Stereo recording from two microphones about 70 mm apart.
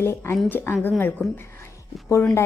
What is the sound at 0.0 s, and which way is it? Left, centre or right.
Speech, left.